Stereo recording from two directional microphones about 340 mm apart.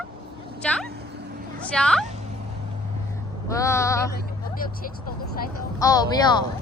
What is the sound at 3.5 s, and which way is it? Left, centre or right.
Speech, centre.